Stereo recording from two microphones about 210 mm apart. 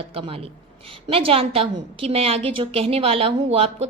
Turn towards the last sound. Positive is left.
turn(degrees=-30)  # may be behind; listen again after turning